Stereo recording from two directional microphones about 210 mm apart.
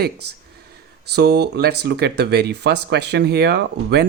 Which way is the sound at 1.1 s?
50° right (ahead or behind).